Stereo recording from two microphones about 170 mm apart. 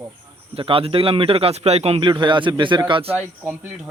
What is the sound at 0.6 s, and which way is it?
Speech, 35° right (ahead or behind).